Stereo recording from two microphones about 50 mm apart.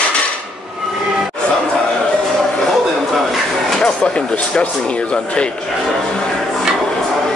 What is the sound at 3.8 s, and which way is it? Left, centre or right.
Speech, left.